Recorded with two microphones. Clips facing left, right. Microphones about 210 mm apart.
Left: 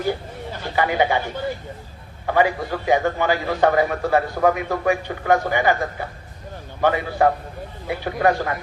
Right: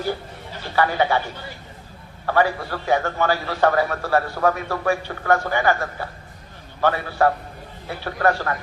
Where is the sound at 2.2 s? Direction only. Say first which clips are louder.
Left 1 dB; 15° left (ahead or behind).